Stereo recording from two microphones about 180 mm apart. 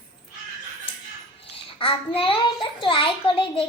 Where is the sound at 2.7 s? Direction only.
30° left (ahead or behind).